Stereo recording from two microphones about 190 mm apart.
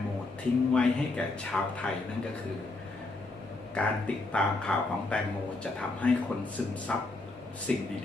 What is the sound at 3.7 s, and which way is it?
A man's voice, 5° left (ahead or behind).